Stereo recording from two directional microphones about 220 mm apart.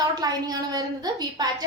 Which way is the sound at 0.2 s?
15° right (ahead or behind).